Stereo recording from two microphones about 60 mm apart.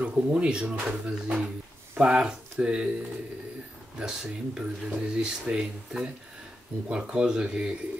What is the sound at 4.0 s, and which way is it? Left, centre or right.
Speech, centre.